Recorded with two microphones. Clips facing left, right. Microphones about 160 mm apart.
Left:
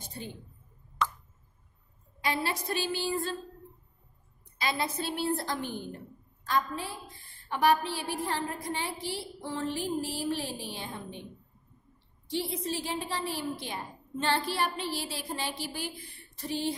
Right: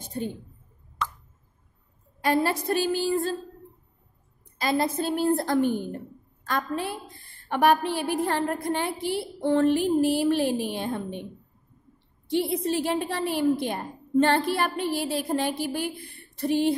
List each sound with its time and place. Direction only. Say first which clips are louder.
2.2 s a woman's voice: right 8 dB; 45° right (ahead or behind)
4.6 s a woman's voice: right 7 dB; 45° right (ahead or behind)
12.3 s a woman's voice: right 8 dB; 60° right (ahead or behind)